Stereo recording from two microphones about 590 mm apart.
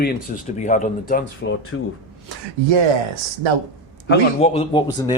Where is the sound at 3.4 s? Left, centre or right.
Right.